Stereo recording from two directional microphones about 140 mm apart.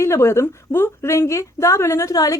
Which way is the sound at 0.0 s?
20° left (ahead or behind).